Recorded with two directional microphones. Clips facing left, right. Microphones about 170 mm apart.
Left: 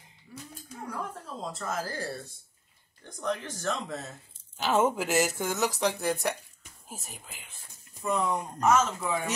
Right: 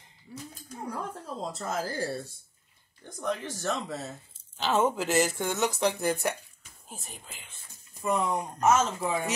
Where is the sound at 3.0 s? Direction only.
5° right (ahead or behind).